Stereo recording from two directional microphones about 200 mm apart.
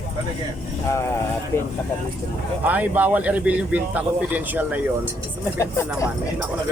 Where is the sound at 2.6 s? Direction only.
10° right (ahead or behind).